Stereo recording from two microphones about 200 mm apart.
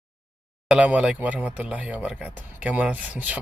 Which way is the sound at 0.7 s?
5° right (ahead or behind).